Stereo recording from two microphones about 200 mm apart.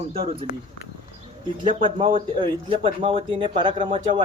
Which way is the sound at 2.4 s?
25° right (ahead or behind).